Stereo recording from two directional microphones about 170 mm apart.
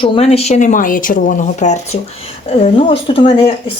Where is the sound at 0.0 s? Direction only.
35° left (ahead or behind).